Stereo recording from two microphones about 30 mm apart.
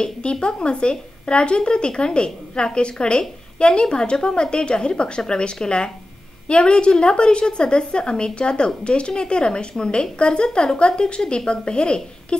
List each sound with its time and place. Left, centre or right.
0.0 s speech: left